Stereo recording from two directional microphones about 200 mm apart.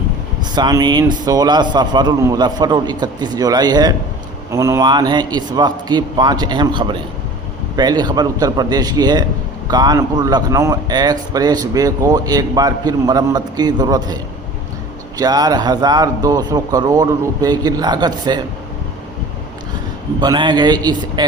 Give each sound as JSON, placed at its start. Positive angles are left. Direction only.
{"t": 0.5, "sound": "a man's voice", "side_deg": -20}
{"t": 15.2, "sound": "a man's voice", "side_deg": -20}
{"t": 20.2, "sound": "a man's voice", "side_deg": -20}